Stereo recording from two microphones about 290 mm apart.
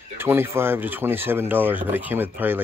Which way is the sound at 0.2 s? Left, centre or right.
Centre.